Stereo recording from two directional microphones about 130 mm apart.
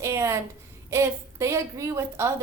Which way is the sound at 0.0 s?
20° right (ahead or behind).